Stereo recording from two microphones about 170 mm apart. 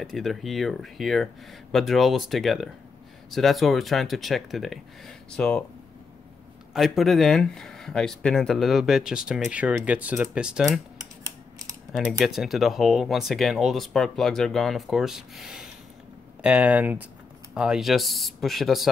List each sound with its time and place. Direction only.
0.0 s speech: centre (ahead or behind)
6.7 s speech: centre (ahead or behind)
11.2 s typing: 20° right (ahead or behind)
11.9 s speech: centre (ahead or behind)